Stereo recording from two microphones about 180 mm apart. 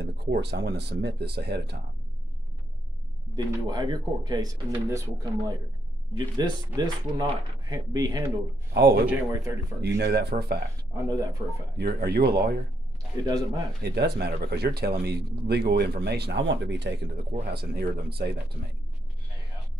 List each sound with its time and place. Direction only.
0.0 s speech: 70° right (ahead or behind)
3.3 s speech: 20° right (ahead or behind)
9.9 s speech: 65° right (ahead or behind)
11.1 s speech: 20° right (ahead or behind)
11.7 s speech: 60° right (ahead or behind)
13.8 s speech: 65° right (ahead or behind)